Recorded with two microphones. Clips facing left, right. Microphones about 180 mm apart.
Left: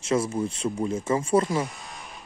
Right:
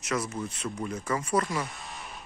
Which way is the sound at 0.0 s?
30° left (ahead or behind).